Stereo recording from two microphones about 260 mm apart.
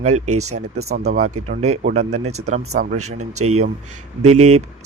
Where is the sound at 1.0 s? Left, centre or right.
Right.